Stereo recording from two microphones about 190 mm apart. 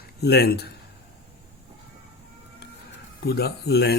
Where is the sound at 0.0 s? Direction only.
60° left (ahead or behind).